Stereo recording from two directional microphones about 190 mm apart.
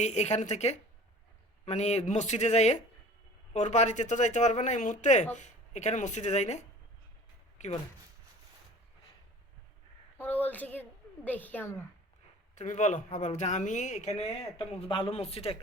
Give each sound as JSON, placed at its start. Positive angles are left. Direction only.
{"t": 0.0, "sound": "speech", "side_deg": 35}
{"t": 10.2, "sound": "a woman's voice", "side_deg": 10}
{"t": 12.5, "sound": "speech", "side_deg": 40}